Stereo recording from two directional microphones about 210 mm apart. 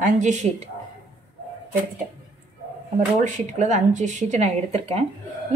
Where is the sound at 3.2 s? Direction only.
35° right (ahead or behind).